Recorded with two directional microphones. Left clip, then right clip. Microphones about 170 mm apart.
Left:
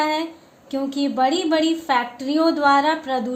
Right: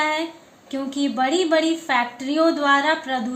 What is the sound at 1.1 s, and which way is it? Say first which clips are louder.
A woman's voice: even; 90° left.